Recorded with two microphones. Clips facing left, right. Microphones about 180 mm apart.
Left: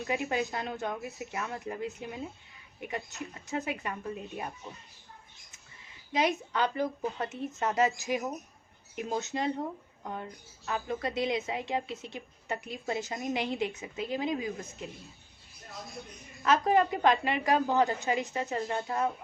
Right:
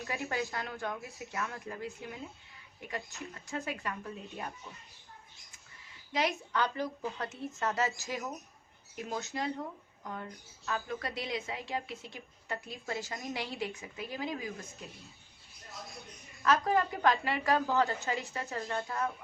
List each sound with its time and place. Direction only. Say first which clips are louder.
0.1 s a woman's voice: left 5 dB; 20° left (ahead or behind)
6.1 s a woman's voice: left 3 dB; 20° left (ahead or behind)
16.4 s a woman's voice: left 3 dB; 20° left (ahead or behind)